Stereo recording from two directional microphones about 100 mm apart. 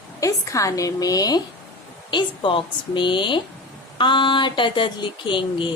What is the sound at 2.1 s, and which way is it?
Speech, 55° left (ahead or behind).